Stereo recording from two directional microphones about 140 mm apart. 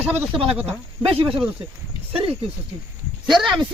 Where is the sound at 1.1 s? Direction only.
40° right (ahead or behind).